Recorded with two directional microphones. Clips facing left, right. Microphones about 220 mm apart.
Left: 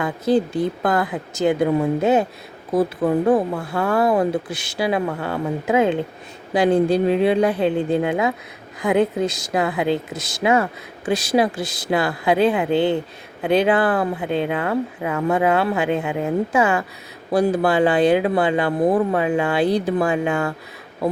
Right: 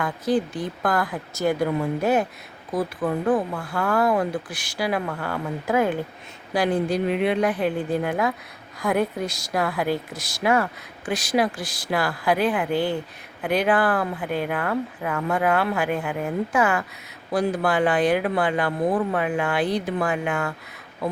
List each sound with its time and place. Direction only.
0.5 s speech: 25° left (ahead or behind)
6.7 s speech: 30° left (ahead or behind)